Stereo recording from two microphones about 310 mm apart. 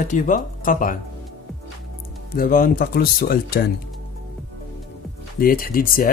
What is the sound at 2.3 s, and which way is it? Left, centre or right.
Speech, left.